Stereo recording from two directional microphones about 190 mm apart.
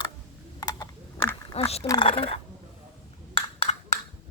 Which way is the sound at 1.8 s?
25° left (ahead or behind).